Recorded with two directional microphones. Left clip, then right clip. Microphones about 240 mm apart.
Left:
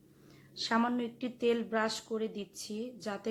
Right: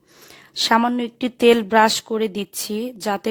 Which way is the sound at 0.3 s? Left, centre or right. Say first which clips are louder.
Right 15 dB; right.